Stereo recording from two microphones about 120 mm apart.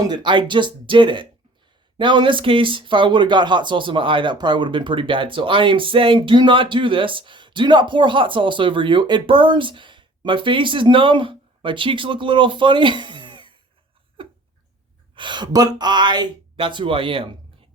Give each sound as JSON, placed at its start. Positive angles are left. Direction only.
{"t": 0.1, "sound": "speech", "side_deg": -40}
{"t": 15.1, "sound": "speech", "side_deg": -40}